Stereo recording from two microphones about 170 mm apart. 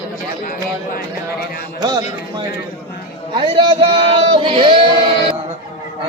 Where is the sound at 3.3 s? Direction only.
30° right (ahead or behind).